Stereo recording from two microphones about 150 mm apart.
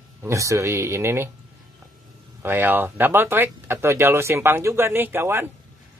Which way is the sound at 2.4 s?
15° right (ahead or behind).